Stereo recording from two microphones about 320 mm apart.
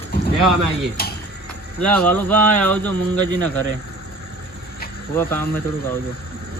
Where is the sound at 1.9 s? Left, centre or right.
Centre.